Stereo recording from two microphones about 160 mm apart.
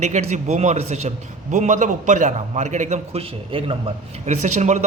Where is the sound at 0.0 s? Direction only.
45° right (ahead or behind).